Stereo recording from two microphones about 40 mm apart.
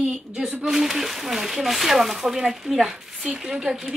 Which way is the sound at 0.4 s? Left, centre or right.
Right.